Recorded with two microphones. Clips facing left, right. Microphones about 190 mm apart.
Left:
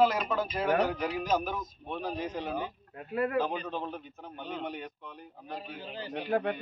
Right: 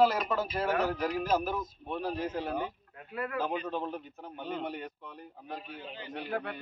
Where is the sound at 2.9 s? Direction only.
35° left (ahead or behind).